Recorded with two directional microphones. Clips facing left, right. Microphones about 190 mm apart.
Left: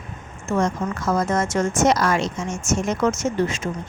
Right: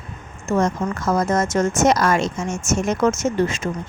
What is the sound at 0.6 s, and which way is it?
Speech, 45° right (ahead or behind).